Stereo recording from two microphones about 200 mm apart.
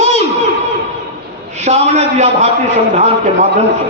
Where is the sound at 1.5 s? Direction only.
35° right (ahead or behind).